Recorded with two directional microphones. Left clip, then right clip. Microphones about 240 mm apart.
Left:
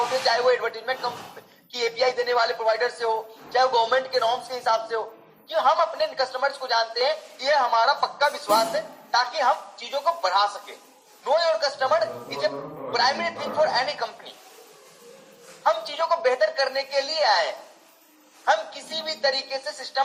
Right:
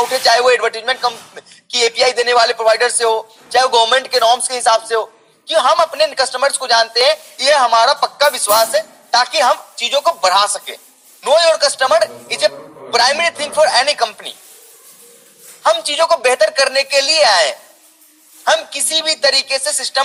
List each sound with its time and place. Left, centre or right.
0.3 s a man's voice: right
15.6 s a man's voice: right